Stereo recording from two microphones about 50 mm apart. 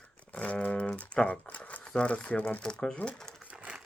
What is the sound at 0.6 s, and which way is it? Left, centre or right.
Speech, left.